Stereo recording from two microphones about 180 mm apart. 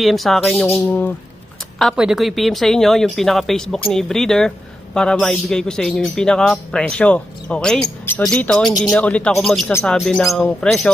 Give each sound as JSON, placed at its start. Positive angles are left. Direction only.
{"t": 0.0, "sound": "speech", "side_deg": 0}
{"t": 0.7, "sound": "speech", "side_deg": 10}
{"t": 1.8, "sound": "speech", "side_deg": 0}